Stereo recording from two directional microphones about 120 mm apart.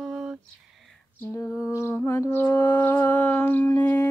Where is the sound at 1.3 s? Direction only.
20° left (ahead or behind).